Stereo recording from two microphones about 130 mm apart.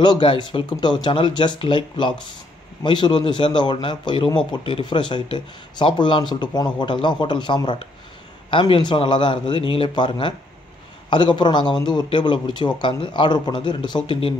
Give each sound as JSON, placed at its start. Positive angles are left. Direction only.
{"t": 0.0, "sound": "speech", "side_deg": 35}